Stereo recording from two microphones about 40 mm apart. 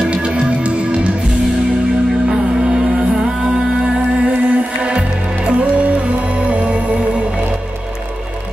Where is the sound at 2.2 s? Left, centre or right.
Centre.